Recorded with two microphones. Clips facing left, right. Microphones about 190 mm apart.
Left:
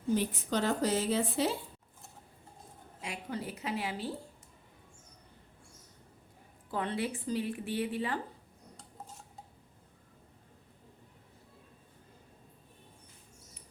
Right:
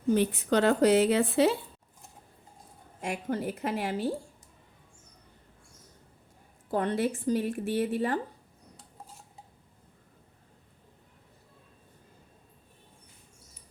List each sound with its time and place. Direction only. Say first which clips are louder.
0.1 s a woman's voice: right 6 dB; 70° right (ahead or behind)
3.0 s speech: right 7 dB; 50° right (ahead or behind)
6.7 s speech: right 6 dB; 45° right (ahead or behind)